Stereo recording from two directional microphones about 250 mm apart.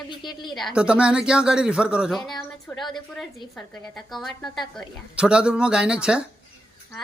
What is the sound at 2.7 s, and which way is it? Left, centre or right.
Speech, centre.